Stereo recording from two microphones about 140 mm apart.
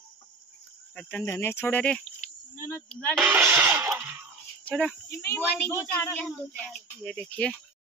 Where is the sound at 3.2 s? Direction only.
10° right (ahead or behind).